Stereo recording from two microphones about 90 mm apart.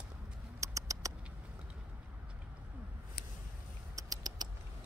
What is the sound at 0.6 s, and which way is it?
Patter, 35° right (ahead or behind).